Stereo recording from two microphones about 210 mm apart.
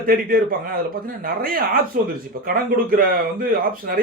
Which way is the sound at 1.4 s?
45° right (ahead or behind).